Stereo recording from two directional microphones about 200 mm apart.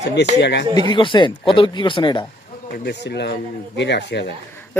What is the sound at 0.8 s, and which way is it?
A man's voice, 20° left (ahead or behind).